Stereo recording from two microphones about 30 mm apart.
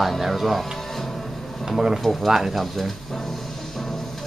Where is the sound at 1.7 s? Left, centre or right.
Centre.